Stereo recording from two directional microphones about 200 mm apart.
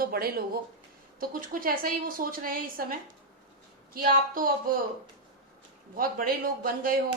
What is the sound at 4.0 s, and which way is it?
Speech, 45° right (ahead or behind).